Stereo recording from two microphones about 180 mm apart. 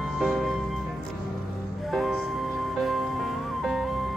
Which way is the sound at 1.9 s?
Centre (ahead or behind).